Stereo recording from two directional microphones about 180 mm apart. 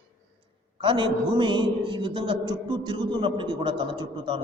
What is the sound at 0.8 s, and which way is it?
A man's voice, 25° right (ahead or behind).